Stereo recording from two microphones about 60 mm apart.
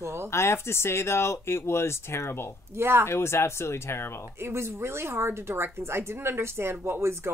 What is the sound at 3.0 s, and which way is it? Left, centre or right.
Speech, left.